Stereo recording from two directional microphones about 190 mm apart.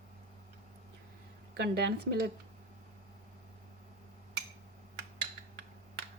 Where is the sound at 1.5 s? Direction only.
60° right (ahead or behind).